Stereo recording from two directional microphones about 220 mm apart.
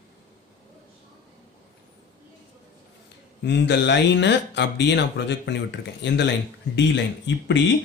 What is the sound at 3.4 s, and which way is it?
Speech, 50° left (ahead or behind).